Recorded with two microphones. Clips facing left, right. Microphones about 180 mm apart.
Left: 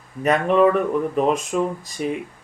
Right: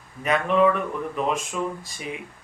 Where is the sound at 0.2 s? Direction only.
40° left (ahead or behind).